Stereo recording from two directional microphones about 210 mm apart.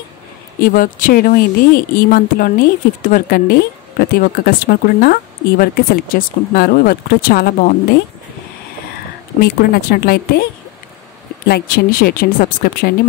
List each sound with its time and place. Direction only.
0.6 s speech: 40° left (ahead or behind)
9.4 s speech: 45° left (ahead or behind)
11.4 s speech: 45° left (ahead or behind)